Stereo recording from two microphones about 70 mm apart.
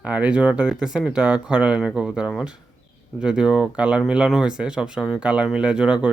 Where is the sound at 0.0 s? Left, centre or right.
Right.